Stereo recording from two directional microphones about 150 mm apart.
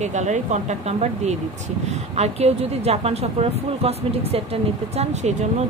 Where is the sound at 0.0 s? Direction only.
50° right (ahead or behind).